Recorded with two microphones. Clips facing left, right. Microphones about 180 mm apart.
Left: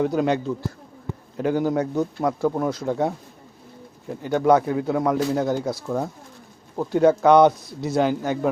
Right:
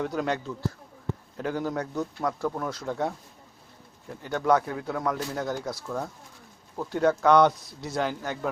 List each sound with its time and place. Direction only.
0.0 s a man's voice: 20° left (ahead or behind)
4.2 s a man's voice: 15° left (ahead or behind)